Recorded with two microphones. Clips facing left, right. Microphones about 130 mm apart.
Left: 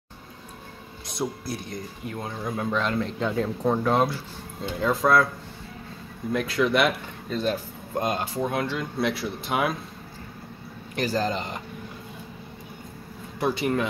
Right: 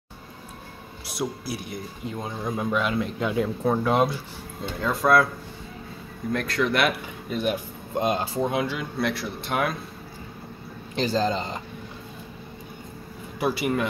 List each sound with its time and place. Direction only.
1.4 s speech: 5° right (ahead or behind)
2.0 s speech: 15° right (ahead or behind)
6.3 s speech: 5° left (ahead or behind)
7.2 s speech: 15° right (ahead or behind)
8.4 s speech: 15° right (ahead or behind)
8.7 s speech: centre (ahead or behind)
11.0 s speech: 25° right (ahead or behind)
13.4 s speech: 5° right (ahead or behind)